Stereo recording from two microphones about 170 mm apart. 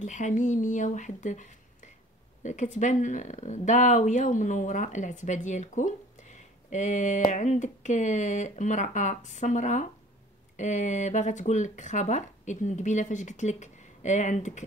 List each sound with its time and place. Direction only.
0.0 s speech: 45° left (ahead or behind)